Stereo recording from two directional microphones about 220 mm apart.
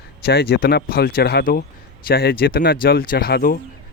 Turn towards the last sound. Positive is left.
turn(degrees=45)  # may be behind; listen again after turning